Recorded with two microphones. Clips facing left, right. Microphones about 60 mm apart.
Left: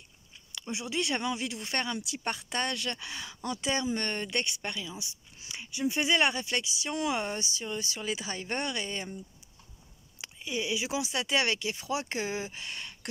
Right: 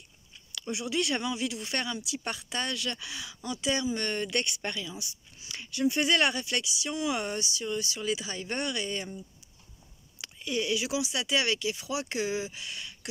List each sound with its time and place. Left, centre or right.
0.5 s speech: left
1.2 s speech: left
10.2 s speech: centre
10.9 s speech: left